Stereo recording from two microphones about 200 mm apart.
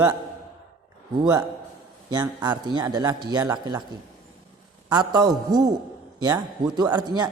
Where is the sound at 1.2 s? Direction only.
20° right (ahead or behind).